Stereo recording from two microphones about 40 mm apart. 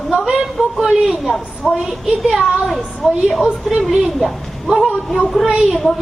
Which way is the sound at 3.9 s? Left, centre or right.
Centre.